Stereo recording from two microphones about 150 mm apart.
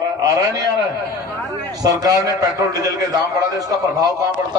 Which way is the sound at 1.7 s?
25° right (ahead or behind).